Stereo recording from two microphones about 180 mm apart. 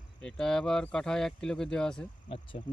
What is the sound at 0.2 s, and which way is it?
Speech, 5° left (ahead or behind).